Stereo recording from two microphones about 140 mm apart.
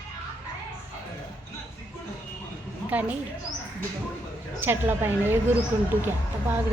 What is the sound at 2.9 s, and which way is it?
Speech, 10° right (ahead or behind).